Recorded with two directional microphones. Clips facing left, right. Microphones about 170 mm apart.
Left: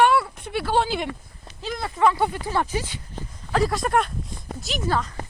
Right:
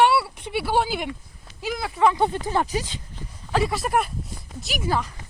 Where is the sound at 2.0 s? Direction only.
20° right (ahead or behind).